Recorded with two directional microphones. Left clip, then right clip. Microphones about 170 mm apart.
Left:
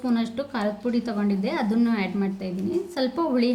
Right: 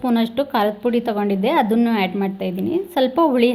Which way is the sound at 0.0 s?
35° right (ahead or behind).